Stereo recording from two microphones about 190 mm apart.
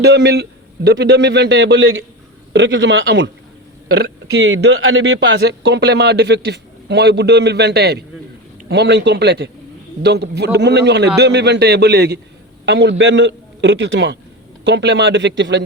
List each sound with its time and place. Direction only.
0.0 s a man's voice: 65° right (ahead or behind); by 2.0 s 90° right
2.5 s a man's voice: 70° right (ahead or behind)
3.9 s a man's voice: 60° right (ahead or behind)